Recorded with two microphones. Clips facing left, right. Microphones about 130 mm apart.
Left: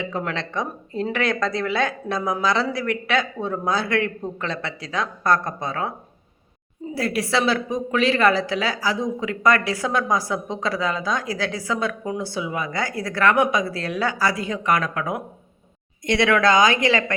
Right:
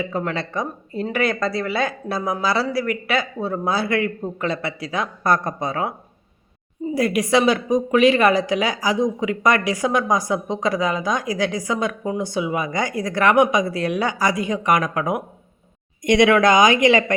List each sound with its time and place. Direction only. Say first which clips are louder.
0.0 s speech: right 2 dB; centre (ahead or behind)
6.9 s a woman's voice: right 4 dB; 15° right (ahead or behind)